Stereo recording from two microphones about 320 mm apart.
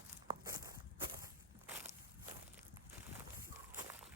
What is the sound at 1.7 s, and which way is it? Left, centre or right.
Walk, centre.